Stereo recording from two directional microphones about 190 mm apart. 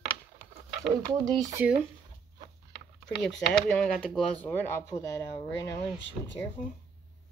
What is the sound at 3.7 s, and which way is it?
Speech, 5° left (ahead or behind).